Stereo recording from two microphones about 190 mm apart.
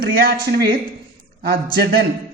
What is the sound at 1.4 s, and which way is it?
Speech, 55° right (ahead or behind).